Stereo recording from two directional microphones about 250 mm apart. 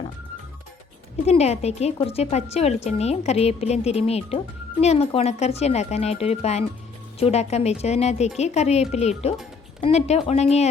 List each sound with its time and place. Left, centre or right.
1.2 s speech: left